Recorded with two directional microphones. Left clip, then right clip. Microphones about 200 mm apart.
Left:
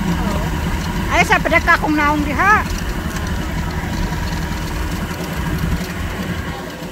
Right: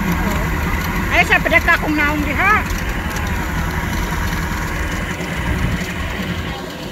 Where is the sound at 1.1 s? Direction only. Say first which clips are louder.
Even; 10° left (ahead or behind).